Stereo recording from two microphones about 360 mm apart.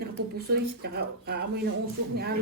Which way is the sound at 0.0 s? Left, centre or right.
Right.